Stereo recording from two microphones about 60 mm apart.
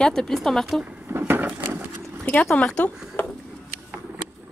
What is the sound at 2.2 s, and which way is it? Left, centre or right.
Speech, left.